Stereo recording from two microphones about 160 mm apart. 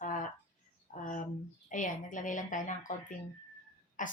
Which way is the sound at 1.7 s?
55° left (ahead or behind).